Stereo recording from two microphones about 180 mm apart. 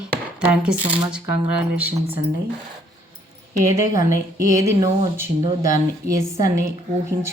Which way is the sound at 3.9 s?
20° right (ahead or behind).